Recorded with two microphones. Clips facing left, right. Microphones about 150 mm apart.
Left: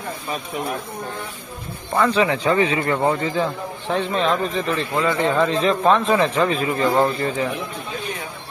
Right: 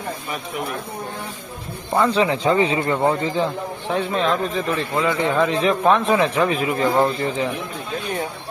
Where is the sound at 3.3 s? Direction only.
15° right (ahead or behind).